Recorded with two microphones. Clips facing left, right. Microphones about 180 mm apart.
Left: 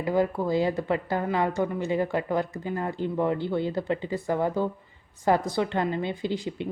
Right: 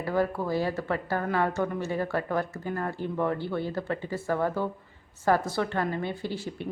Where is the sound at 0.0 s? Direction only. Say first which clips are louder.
Left 3 dB; 15° left (ahead or behind).